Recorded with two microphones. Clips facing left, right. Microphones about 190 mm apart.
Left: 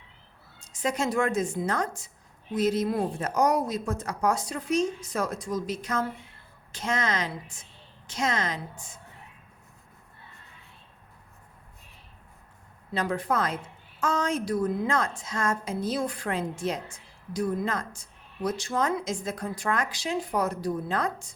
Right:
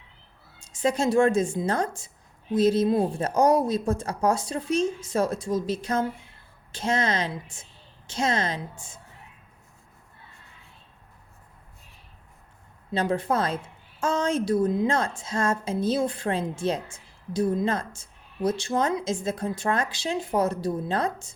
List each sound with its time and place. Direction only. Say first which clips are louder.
0.6 s a woman's voice: right 4 dB; 30° right (ahead or behind)
12.9 s a woman's voice: right 3 dB; 25° right (ahead or behind)